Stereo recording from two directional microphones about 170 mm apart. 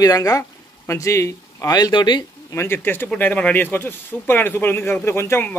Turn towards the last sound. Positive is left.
turn(degrees=15)  # may be behind; listen again after turning